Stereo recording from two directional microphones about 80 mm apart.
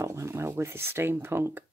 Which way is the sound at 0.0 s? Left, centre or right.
Right.